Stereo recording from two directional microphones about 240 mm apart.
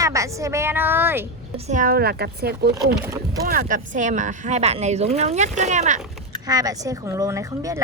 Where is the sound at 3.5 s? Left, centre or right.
Right.